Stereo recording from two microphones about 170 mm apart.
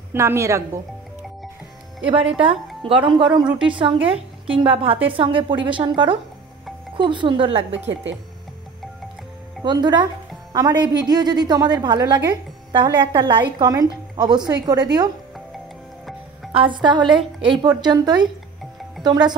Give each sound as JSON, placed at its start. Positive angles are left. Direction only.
{"t": 0.1, "sound": "a woman's voice", "side_deg": -15}
{"t": 2.9, "sound": "a woman's voice", "side_deg": -30}
{"t": 7.9, "sound": "speech", "side_deg": -90}
{"t": 9.6, "sound": "speech", "side_deg": -25}
{"t": 16.5, "sound": "speech", "side_deg": -30}